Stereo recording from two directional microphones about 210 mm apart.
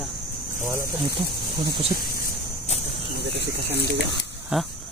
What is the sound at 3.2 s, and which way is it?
Speech, 55° right (ahead or behind).